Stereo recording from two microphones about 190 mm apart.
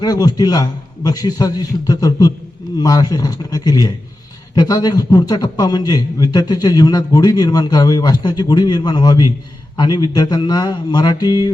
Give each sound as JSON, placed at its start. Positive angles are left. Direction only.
{"t": 0.0, "sound": "a man's voice", "side_deg": 20}